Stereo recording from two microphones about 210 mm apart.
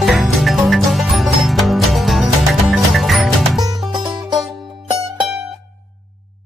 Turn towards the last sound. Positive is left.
turn(degrees=0)  # may be behind; listen again after turning